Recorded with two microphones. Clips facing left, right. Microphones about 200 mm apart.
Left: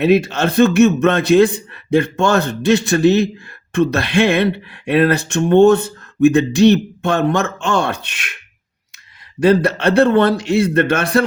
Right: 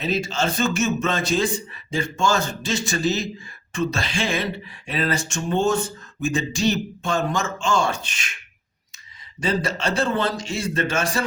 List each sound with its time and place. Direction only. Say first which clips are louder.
0.0 s speech: left 10 dB; 60° left (ahead or behind)
9.4 s speech: left 11 dB; 60° left (ahead or behind)